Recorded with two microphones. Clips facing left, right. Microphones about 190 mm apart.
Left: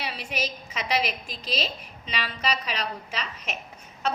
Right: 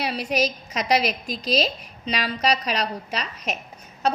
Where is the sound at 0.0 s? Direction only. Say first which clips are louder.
Right 8 dB; 40° right (ahead or behind).